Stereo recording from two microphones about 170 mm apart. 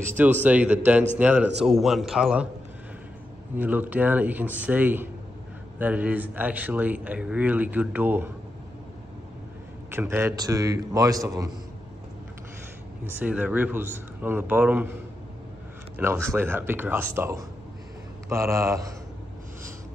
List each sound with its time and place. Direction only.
0.2 s a man's voice: 10° right (ahead or behind)
3.5 s speech: 10° right (ahead or behind)
9.8 s a man's voice: 15° right (ahead or behind)
13.1 s speech: 10° right (ahead or behind)
16.3 s speech: 15° right (ahead or behind)